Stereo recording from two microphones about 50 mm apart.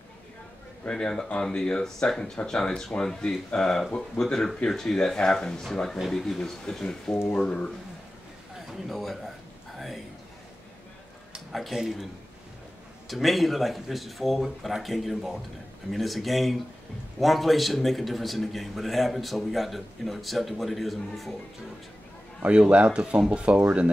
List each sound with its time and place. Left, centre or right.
0.8 s speech: centre
8.8 s a man's voice: centre
9.8 s a sound: centre
11.5 s a man's voice: centre
13.1 s a man's voice: centre
22.4 s speech: right